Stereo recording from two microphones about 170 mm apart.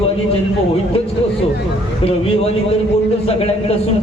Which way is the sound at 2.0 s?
35° left (ahead or behind).